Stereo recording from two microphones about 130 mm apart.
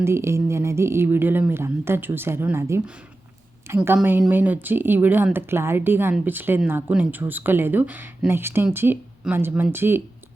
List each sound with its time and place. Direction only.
0.0 s speech: 20° right (ahead or behind)